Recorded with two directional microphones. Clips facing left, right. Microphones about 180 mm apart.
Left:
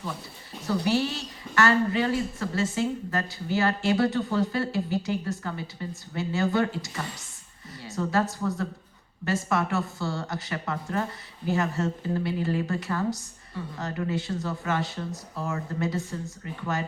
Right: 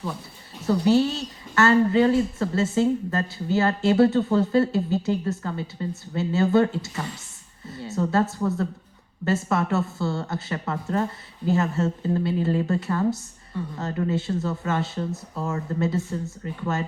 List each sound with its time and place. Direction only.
0.9 s a woman's voice: 25° right (ahead or behind)